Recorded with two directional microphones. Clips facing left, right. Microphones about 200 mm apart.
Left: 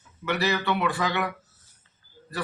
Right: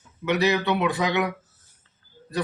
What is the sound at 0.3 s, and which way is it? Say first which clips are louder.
Speech: right 4 dB; 20° right (ahead or behind).